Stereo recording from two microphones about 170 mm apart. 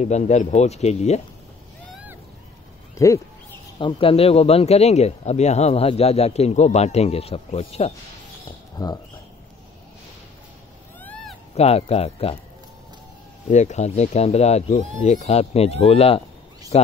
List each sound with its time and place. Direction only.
0.0 s a man's voice: 45° left (ahead or behind)
3.7 s a man's voice: 30° left (ahead or behind)
8.5 s bird: 25° left (ahead or behind)
11.0 s cat: 10° left (ahead or behind)
11.5 s a man's voice: 40° left (ahead or behind)
13.5 s a man's voice: 45° left (ahead or behind)